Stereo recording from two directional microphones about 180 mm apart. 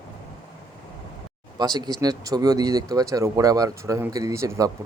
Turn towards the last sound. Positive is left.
turn(degrees=-15)  # may be behind; listen again after turning